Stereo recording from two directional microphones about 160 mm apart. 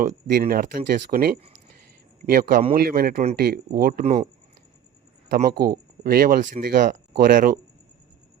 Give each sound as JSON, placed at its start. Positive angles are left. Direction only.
{"t": 0.0, "sound": "speech", "side_deg": -55}
{"t": 2.7, "sound": "speech", "side_deg": -70}
{"t": 4.0, "sound": "speech", "side_deg": -40}
{"t": 5.3, "sound": "speech", "side_deg": -75}